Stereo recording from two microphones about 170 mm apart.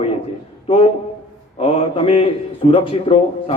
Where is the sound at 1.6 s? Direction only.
35° left (ahead or behind).